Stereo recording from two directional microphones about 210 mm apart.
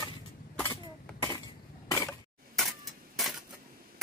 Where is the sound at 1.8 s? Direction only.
15° left (ahead or behind).